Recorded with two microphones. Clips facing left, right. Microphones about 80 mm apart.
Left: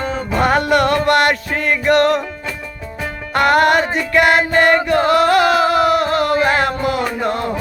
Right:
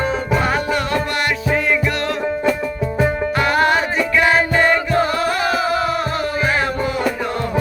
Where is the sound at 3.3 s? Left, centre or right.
Left.